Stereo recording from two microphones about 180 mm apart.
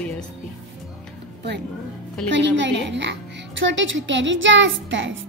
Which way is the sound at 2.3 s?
80° right.